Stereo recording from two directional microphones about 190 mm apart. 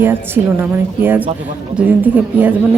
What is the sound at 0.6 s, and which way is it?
A woman's voice, 10° right (ahead or behind).